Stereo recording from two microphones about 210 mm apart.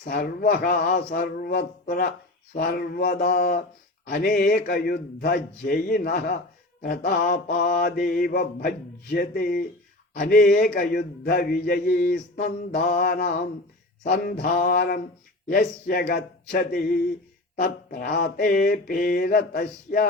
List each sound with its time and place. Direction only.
0.0 s a man's voice: 45° left (ahead or behind)